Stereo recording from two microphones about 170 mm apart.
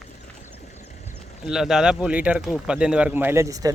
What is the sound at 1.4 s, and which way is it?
Speech, centre (ahead or behind).